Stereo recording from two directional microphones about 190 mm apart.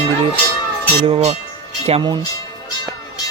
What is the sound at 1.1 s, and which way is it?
Speech, 35° right (ahead or behind).